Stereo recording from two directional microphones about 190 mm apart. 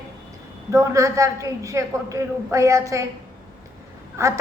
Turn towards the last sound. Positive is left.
turn(degrees=-15)  # may be behind; listen again after turning